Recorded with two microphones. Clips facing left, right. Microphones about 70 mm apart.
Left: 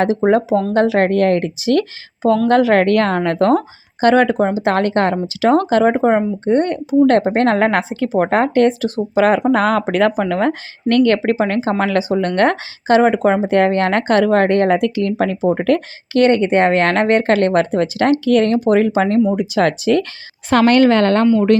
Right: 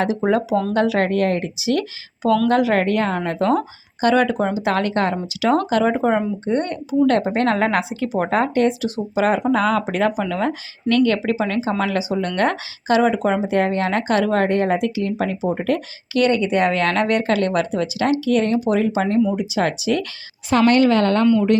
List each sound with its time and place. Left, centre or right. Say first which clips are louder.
0.3 s speech: left 4 dB; left
2.2 s a woman's voice: left 3 dB; left
2.5 s speech: left 5 dB; left
2.8 s speech: left 5 dB; left
6.4 s speech: left 6 dB; left
14.4 s speech: left 5 dB; left